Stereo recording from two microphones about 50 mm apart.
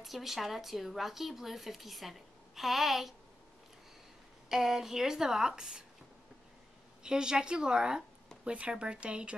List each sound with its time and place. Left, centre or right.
0.0 s speech: centre
4.5 s a woman's voice: centre
7.0 s a woman's voice: centre